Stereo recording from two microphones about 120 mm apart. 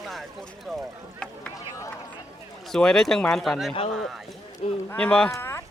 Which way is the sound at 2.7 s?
5° left (ahead or behind).